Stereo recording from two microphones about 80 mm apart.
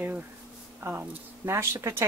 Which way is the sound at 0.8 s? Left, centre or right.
Right.